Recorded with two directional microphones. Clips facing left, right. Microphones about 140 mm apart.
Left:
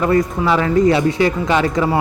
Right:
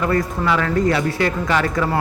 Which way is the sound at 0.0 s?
25° left (ahead or behind).